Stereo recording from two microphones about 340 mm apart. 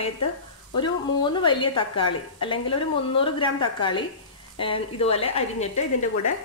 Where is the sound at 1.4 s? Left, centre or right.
Centre.